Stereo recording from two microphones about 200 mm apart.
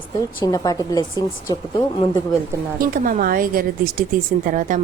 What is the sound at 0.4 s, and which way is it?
Speech, 20° left (ahead or behind).